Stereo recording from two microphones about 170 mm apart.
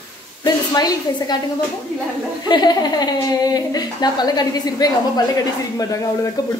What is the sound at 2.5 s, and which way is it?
A woman's voice, 25° left (ahead or behind).